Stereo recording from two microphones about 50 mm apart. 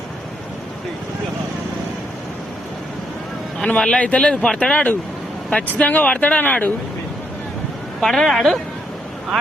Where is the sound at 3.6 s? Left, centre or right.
Centre.